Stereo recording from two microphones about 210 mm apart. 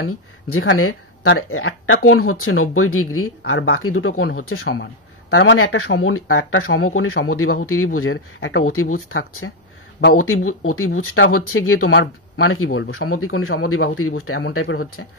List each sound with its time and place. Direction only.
0.0 s speech: 85° left
5.3 s speech: 70° left (ahead or behind)
10.1 s speech: 80° left
13.1 s speech: 90° left
14.5 s speech: 80° left